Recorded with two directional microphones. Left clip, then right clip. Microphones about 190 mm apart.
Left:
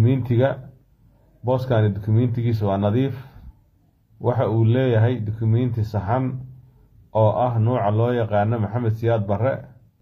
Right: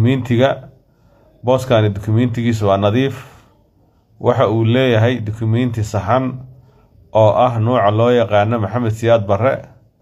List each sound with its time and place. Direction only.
0.0 s a man's voice: 15° right (ahead or behind)